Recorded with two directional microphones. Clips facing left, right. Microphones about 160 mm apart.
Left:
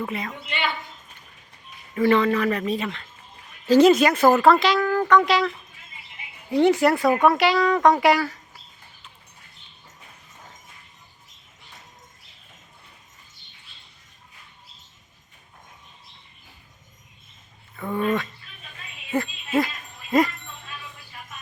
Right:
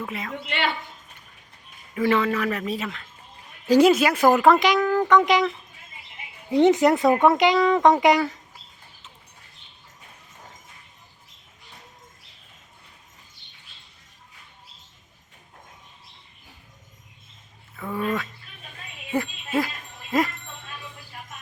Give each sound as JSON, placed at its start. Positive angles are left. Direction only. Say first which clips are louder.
{"t": 0.0, "sound": "a man's voice", "louder": "left 2 dB", "side_deg": 0}
{"t": 0.4, "sound": "a woman's voice", "louder": "right 3 dB", "side_deg": -70}
{"t": 2.0, "sound": "a man's voice", "louder": "left 3 dB", "side_deg": -5}
{"t": 6.5, "sound": "speech", "louder": "right 1 dB", "side_deg": -20}
{"t": 17.7, "sound": "a man's voice", "louder": "left 3 dB", "side_deg": -5}
{"t": 19.5, "sound": "jingle bell", "louder": "left 2 dB", "side_deg": 0}